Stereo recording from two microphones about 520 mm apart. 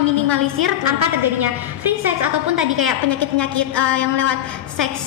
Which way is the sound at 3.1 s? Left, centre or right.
Right.